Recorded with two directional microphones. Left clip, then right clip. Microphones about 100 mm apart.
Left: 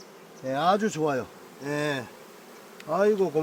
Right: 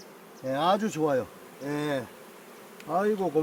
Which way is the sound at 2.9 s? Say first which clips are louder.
Left 3 dB; 90° left.